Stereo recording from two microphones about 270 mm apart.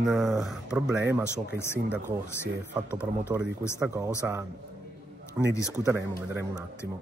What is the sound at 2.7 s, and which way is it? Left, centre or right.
Speech, centre.